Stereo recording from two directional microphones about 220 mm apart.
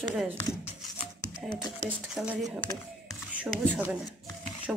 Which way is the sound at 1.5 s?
20° left (ahead or behind).